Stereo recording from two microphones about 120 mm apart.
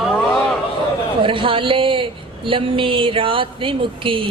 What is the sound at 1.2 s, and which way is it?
A woman's voice, 45° right (ahead or behind).